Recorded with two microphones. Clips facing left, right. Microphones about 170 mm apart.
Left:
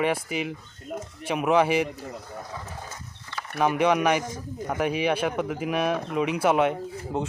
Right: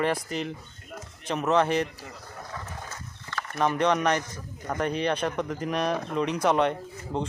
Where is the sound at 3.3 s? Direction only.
10° left (ahead or behind).